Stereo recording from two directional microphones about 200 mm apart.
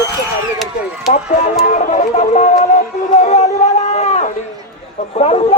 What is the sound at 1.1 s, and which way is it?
Speech, 35° left (ahead or behind).